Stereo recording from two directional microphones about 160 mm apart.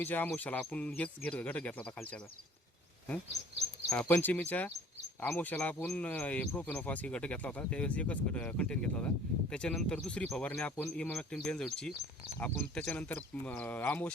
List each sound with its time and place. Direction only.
0.0 s speech: 10° left (ahead or behind)
3.8 s speech: 15° left (ahead or behind)